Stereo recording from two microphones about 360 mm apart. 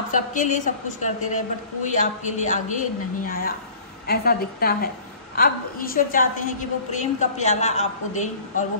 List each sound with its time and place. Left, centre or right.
0.1 s a woman's voice: left